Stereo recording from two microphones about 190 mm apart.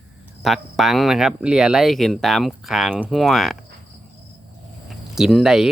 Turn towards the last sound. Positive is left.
turn(degrees=0)  # may be behind; listen again after turning